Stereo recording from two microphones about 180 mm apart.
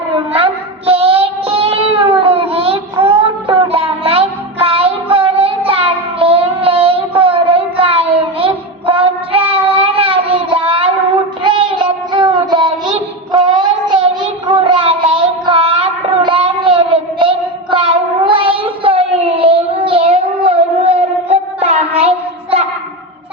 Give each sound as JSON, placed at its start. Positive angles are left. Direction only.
{"t": 0.3, "sound": "child singing", "side_deg": -30}